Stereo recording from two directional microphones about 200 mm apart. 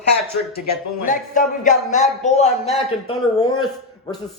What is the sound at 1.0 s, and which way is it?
Speech, 40° left (ahead or behind).